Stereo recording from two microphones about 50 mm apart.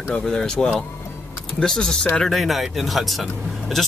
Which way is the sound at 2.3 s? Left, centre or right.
Centre.